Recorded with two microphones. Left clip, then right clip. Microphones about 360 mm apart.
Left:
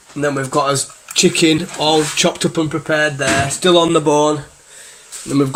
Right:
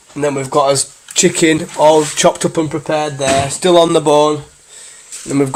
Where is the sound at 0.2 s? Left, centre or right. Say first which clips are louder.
Right 3 dB; centre.